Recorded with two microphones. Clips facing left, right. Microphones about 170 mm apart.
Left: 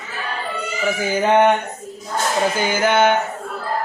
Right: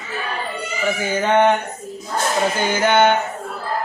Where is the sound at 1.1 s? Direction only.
10° left (ahead or behind).